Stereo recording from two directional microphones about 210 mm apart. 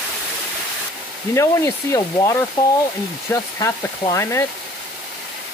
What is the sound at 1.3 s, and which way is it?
Speech, 15° left (ahead or behind).